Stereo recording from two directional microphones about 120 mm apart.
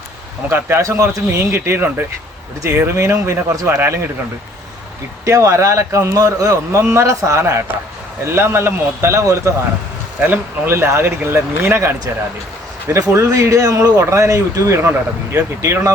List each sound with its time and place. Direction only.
0.5 s speech: 25° right (ahead or behind)
5.2 s speech: 25° right (ahead or behind)